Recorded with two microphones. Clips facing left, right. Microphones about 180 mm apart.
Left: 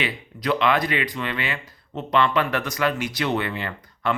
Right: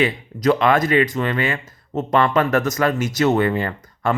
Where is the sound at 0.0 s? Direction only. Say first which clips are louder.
Right 9 dB; 45° right (ahead or behind).